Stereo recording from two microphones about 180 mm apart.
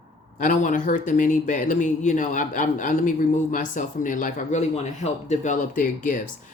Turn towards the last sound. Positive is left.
turn(degrees=45)  # may be behind; listen again after turning